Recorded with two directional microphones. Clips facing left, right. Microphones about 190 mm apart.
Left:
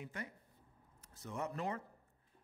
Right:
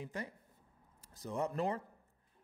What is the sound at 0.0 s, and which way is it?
A man's voice, 35° right (ahead or behind).